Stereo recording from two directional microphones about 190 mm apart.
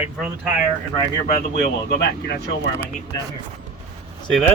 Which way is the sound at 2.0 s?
60° left (ahead or behind).